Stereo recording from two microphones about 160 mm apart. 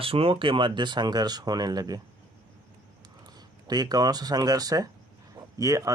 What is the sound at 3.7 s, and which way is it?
Speech, 25° right (ahead or behind).